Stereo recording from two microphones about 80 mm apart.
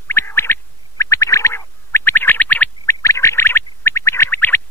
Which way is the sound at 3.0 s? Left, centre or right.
Left.